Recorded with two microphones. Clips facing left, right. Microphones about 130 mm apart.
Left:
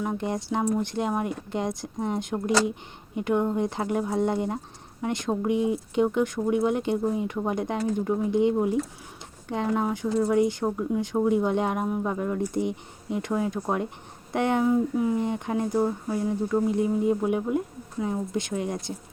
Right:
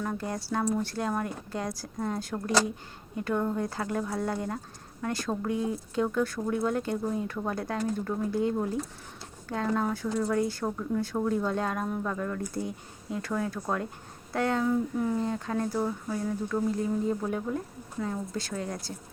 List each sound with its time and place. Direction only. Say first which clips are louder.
0.0 s speech: left 4 dB; 20° left (ahead or behind)